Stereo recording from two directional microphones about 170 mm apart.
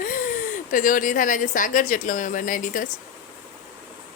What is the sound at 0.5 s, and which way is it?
Speech, 50° left (ahead or behind).